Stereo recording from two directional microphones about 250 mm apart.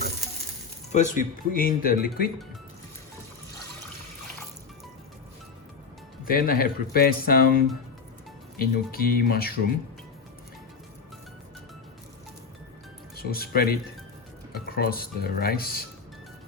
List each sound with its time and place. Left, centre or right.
0.9 s speech: left
6.2 s speech: left
13.1 s speech: left